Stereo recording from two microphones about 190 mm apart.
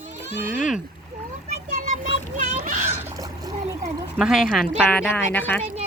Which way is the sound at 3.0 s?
15° right (ahead or behind).